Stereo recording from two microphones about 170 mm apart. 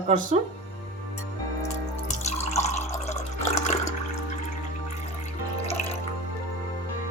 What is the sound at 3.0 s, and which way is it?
Water, 40° left (ahead or behind).